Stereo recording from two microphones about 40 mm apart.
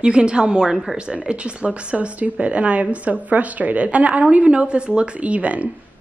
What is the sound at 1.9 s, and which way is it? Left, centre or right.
A woman's voice, right.